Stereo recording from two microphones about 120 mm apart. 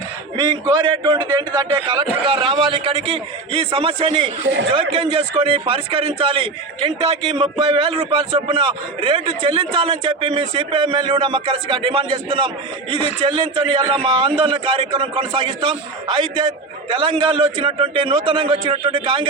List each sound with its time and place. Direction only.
0.3 s a man's voice: 40° right (ahead or behind)
16.9 s a man's voice: 45° right (ahead or behind)